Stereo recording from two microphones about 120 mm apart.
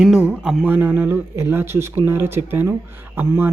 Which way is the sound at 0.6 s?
15° right (ahead or behind).